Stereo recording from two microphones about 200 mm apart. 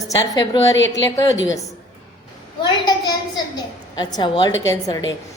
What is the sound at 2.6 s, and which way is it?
A woman's voice, 20° left (ahead or behind).